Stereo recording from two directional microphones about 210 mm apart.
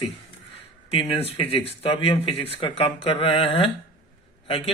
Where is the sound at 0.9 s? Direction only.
25° left (ahead or behind).